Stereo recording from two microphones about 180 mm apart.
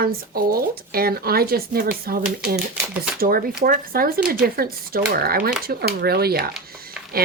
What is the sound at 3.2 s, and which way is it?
A woman's voice, 55° right (ahead or behind).